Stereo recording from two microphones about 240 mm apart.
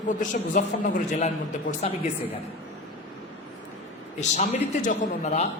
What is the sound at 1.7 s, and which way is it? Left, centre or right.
Speech, left.